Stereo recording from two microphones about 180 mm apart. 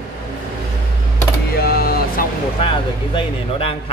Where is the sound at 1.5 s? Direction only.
60° left (ahead or behind).